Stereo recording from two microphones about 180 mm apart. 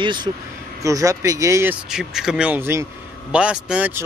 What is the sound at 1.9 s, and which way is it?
Speech, 5° right (ahead or behind).